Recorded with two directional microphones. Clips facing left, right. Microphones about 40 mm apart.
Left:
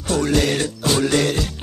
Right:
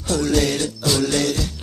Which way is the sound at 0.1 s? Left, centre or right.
Left.